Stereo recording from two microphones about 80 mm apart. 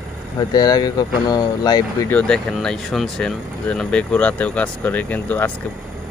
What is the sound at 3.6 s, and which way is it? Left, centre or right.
Speech, centre.